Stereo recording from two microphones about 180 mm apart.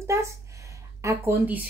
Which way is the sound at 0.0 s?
15° right (ahead or behind).